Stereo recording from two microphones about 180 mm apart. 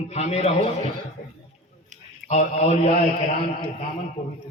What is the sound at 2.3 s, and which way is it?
Speech, 40° left (ahead or behind).